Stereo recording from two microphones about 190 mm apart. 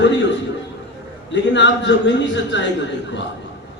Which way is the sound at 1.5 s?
70° left (ahead or behind).